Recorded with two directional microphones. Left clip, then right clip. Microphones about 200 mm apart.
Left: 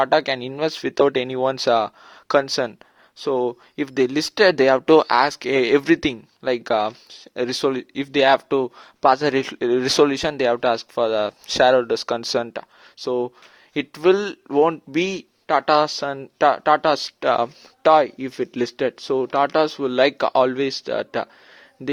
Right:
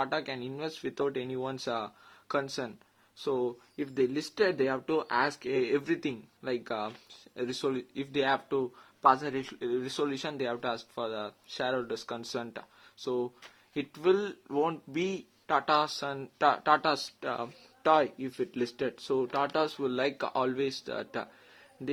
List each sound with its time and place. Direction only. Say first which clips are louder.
0.0 s speech: left 14 dB; 40° left (ahead or behind)